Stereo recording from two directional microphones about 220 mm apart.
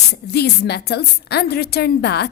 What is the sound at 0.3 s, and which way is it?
A woman's voice, 50° left (ahead or behind).